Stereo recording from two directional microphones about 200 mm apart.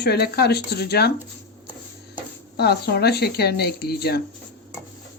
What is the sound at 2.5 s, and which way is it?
Speech, 55° left (ahead or behind).